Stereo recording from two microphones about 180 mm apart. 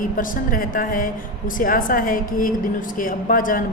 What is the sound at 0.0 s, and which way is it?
A woman's voice, 50° left (ahead or behind).